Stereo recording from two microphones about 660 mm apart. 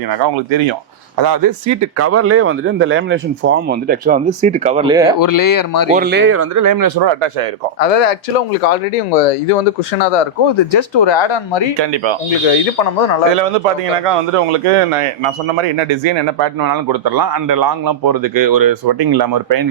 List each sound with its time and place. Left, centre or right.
0.1 s a man's voice: right; by 5.1 s centre
5.2 s speech: left
5.9 s speech: centre; by 7.4 s right
7.8 s speech: left
8.6 s speech: left
10.0 s speech: left
11.8 s a man's voice: right
13.3 s speech: right
14.0 s a man's voice: right